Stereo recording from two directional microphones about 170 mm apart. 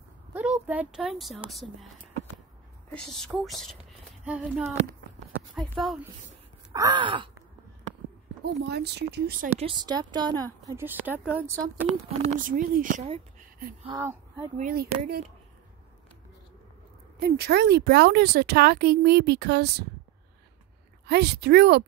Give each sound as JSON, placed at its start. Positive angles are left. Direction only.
{"t": 0.3, "sound": "speech", "side_deg": -10}
{"t": 2.9, "sound": "speech", "side_deg": 5}
{"t": 5.5, "sound": "a sound", "side_deg": 0}
{"t": 6.7, "sound": "speech", "side_deg": -25}
{"t": 8.5, "sound": "speech", "side_deg": -75}
{"t": 9.6, "sound": "speech", "side_deg": -30}
{"t": 10.7, "sound": "speech", "side_deg": -15}
{"t": 12.2, "sound": "speech", "side_deg": -50}
{"t": 13.4, "sound": "a sound", "side_deg": -55}
{"t": 13.9, "sound": "speech", "side_deg": -15}
{"t": 14.6, "sound": "speech", "side_deg": -65}
{"t": 17.2, "sound": "speech", "side_deg": -70}
{"t": 21.1, "sound": "speech", "side_deg": -75}